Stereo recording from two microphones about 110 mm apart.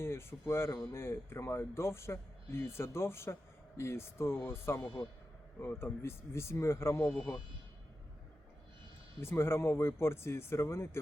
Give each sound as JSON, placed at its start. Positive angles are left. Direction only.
{"t": 0.0, "sound": "speech", "side_deg": 20}
{"t": 7.1, "sound": "a man's voice", "side_deg": 5}
{"t": 9.2, "sound": "speech", "side_deg": 20}